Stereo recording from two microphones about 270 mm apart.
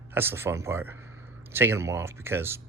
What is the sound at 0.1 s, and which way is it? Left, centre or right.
Speech, centre.